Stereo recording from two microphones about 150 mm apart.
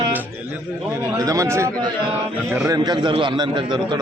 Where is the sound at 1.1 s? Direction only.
20° right (ahead or behind).